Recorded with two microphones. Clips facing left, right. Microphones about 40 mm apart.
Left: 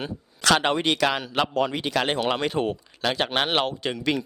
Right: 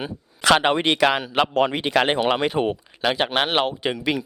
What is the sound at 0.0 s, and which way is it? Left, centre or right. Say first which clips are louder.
Speech: right 3 dB; centre.